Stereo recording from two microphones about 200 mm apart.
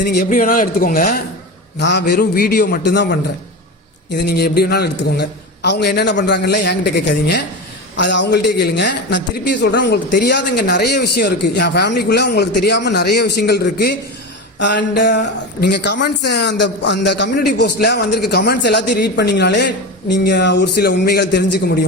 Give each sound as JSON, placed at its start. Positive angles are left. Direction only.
{"t": 0.0, "sound": "a man's voice", "side_deg": 55}
{"t": 1.8, "sound": "a man's voice", "side_deg": 60}